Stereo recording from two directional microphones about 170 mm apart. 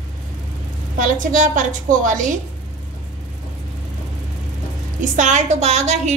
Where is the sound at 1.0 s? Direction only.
50° right (ahead or behind).